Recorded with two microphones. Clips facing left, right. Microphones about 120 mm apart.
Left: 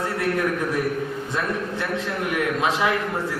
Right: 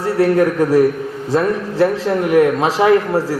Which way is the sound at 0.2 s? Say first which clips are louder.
Right 12 dB; 35° right (ahead or behind).